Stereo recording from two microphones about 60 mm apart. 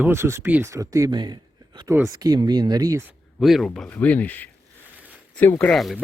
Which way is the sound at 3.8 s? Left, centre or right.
Left.